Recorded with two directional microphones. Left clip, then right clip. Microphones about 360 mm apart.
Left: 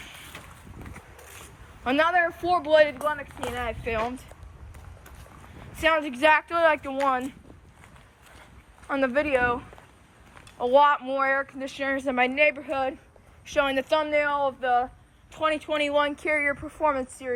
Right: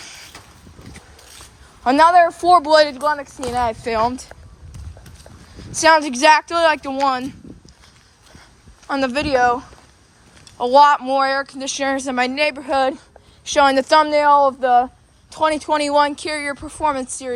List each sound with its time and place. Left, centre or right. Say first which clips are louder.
1.8 s speech: right 11 dB; centre
5.8 s speech: right 9 dB; centre
8.9 s speech: right 5 dB; centre
10.6 s speech: right 8 dB; centre